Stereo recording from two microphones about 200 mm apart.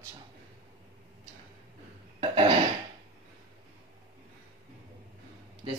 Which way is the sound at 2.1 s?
25° right (ahead or behind).